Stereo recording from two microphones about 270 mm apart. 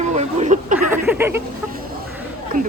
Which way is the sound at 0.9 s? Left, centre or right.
Centre.